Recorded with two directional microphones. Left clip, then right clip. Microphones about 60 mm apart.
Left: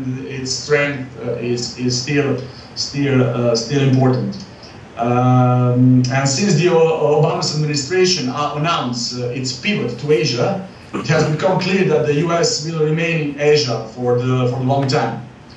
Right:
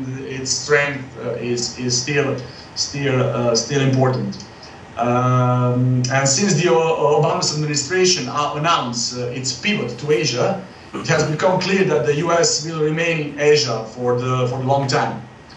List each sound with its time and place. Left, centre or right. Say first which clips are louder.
0.4 s speech: even; right